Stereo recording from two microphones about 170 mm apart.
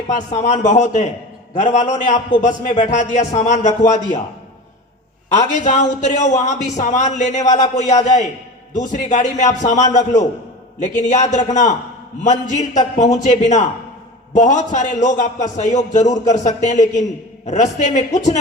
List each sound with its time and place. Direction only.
0.1 s a man's voice: 45° left (ahead or behind)
5.3 s a man's voice: 45° left (ahead or behind)
16.0 s a man's voice: 20° left (ahead or behind)
16.3 s a man's voice: 45° left (ahead or behind)